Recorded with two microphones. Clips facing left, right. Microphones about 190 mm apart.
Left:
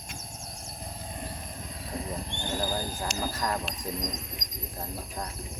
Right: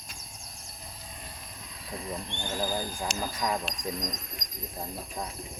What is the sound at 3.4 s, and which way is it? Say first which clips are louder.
Speech: right 2 dB; 10° right (ahead or behind).